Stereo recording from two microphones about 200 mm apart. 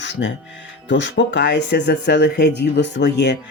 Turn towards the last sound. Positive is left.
turn(degrees=60)  # may be behind; listen again after turning